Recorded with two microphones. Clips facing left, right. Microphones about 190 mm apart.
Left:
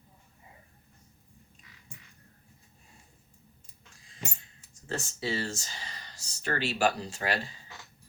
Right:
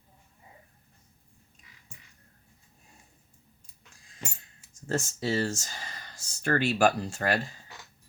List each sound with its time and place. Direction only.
4.9 s speech: 45° right (ahead or behind)